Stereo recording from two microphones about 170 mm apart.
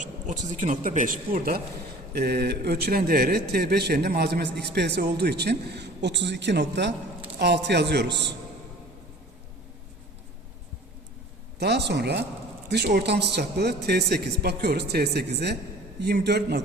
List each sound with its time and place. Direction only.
0.0 s speech: 45° right (ahead or behind)
2.1 s a man's voice: 70° right (ahead or behind); by 8.3 s 90° right
11.6 s a man's voice: 85° right